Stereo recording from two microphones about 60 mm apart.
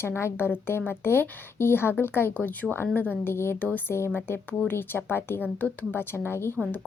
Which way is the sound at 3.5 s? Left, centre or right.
Left.